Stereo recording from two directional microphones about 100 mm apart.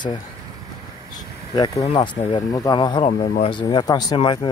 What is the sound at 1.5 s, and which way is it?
Speech, 40° left (ahead or behind).